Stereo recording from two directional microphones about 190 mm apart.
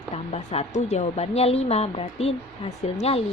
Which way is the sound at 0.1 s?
35° left (ahead or behind).